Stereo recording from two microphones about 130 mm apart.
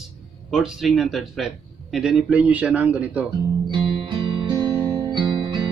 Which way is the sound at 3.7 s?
40° right (ahead or behind).